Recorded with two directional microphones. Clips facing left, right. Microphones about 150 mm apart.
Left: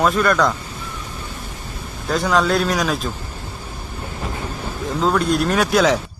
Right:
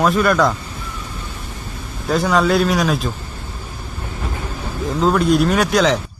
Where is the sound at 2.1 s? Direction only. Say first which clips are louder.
Right 2 dB; centre (ahead or behind).